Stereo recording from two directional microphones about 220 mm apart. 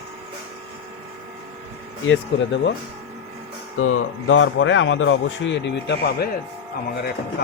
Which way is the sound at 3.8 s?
70° left (ahead or behind).